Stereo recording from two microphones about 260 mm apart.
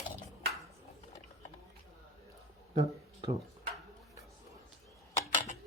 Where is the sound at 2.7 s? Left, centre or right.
Right.